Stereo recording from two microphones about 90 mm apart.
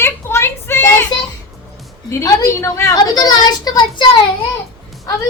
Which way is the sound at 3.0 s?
45° left (ahead or behind).